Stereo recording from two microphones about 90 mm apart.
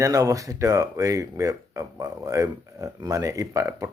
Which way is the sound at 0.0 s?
40° right (ahead or behind).